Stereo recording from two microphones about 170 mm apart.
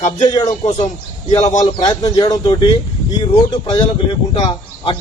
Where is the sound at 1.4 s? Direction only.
45° left (ahead or behind).